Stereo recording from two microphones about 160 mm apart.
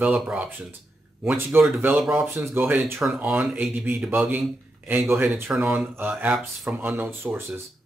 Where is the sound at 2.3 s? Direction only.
15° right (ahead or behind).